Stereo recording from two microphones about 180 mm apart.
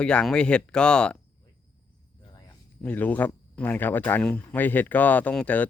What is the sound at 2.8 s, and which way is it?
Speech, 10° left (ahead or behind).